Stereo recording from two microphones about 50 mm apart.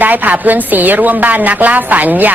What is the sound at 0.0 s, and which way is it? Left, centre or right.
A woman's voice, right.